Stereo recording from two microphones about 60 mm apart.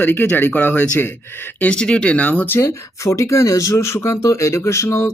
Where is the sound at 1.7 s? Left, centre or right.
Centre.